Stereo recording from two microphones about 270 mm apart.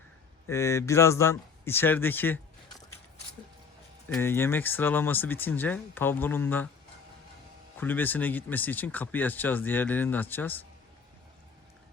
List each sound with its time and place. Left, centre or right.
0.4 s speech: centre
4.1 s speech: centre
7.8 s speech: centre